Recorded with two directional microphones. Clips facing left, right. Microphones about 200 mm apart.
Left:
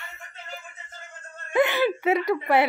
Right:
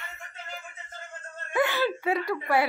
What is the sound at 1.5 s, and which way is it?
Whimper, 20° left (ahead or behind).